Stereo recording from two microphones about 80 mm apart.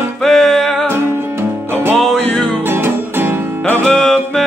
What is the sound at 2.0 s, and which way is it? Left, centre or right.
Music, centre.